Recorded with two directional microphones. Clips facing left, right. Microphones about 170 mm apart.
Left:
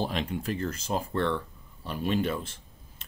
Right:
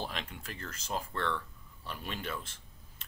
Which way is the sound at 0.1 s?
30° left (ahead or behind).